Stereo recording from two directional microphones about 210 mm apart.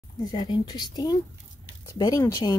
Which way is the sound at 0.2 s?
20° left (ahead or behind).